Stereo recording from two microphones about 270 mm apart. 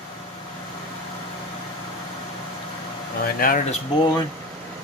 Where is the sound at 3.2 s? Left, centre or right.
Left.